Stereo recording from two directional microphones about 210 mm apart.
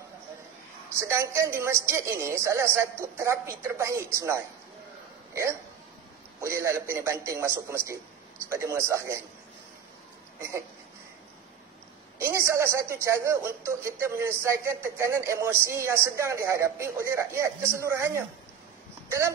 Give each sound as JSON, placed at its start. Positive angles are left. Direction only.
{"t": 0.9, "sound": "a woman's voice", "side_deg": -15}
{"t": 12.2, "sound": "a woman's voice", "side_deg": -15}